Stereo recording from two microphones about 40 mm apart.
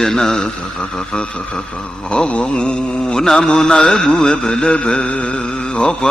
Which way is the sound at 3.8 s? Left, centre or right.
Centre.